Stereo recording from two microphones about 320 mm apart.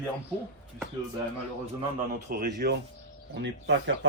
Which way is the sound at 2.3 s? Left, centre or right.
Right.